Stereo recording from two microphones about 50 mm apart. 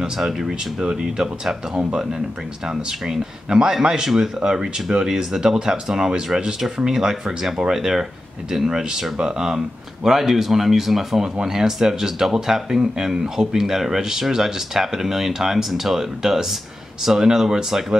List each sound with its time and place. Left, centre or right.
0.0 s a man's voice: centre